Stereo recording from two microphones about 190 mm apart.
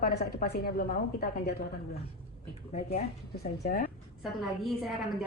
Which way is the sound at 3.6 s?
50° left (ahead or behind).